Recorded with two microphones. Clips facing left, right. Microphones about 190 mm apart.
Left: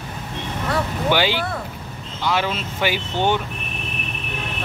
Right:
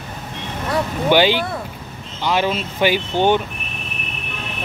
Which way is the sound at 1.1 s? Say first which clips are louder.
Right 6 dB; 20° right (ahead or behind).